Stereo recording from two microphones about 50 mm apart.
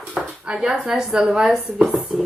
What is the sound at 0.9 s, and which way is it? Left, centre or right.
Speech, centre.